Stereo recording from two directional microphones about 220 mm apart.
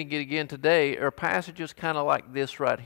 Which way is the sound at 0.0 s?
10° left (ahead or behind).